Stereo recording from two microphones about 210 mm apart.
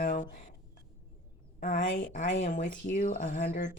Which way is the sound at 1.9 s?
60° left (ahead or behind).